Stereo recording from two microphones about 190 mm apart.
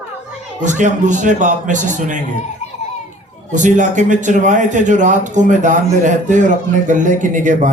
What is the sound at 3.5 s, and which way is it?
A man's voice, 40° right (ahead or behind).